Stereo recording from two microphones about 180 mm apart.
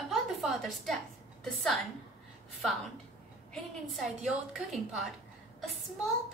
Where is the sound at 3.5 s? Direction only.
Centre (ahead or behind).